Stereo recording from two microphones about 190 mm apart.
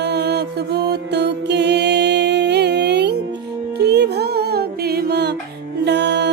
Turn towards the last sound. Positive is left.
turn(degrees=-65)  # may be behind; listen again after turning